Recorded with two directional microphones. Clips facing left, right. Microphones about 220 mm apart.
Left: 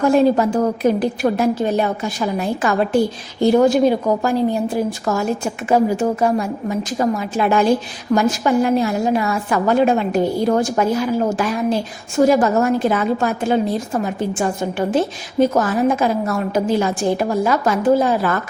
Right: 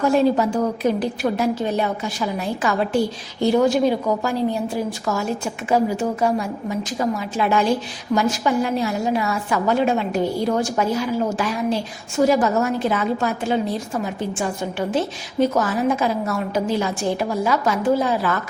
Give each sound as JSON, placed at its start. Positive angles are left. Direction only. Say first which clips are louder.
{"t": 0.0, "sound": "a woman's voice", "louder": "left 3 dB", "side_deg": 50}